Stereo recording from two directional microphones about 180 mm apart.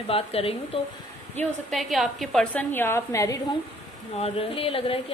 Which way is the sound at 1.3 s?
5° left (ahead or behind).